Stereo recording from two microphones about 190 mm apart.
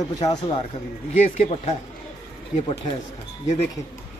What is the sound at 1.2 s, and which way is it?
Speech, 35° left (ahead or behind).